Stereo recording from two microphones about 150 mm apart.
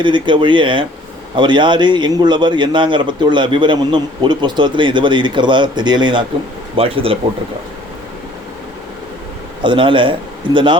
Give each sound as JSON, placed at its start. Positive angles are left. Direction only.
{"t": 0.0, "sound": "a man's voice", "side_deg": -30}
{"t": 9.6, "sound": "a man's voice", "side_deg": -35}